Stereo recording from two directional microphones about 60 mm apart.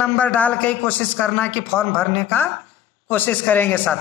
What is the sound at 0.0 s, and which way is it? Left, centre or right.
A man's voice, left.